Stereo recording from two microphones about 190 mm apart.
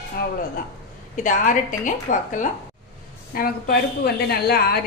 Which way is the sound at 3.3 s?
55° left (ahead or behind).